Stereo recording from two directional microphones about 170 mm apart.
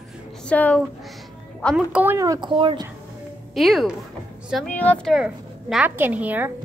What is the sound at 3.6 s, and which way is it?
A woman's voice, centre (ahead or behind).